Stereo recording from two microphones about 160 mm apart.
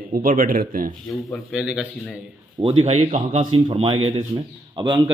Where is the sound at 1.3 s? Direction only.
5° right (ahead or behind).